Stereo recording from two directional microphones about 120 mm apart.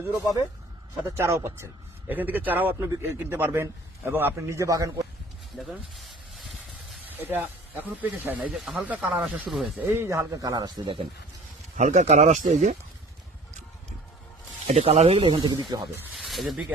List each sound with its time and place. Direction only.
1.0 s speech: 25° right (ahead or behind)
5.5 s a sound: centre (ahead or behind)
7.0 s speech: 15° right (ahead or behind)
9.8 s speech: 20° right (ahead or behind); by 11.0 s 40° right (ahead or behind)
11.8 s speech: 80° right
14.7 s speech: 60° right (ahead or behind); by 15.9 s 35° right (ahead or behind)
16.1 s speech: centre (ahead or behind)